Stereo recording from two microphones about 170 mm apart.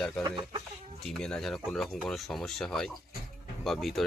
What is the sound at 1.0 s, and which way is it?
Speech, 5° left (ahead or behind).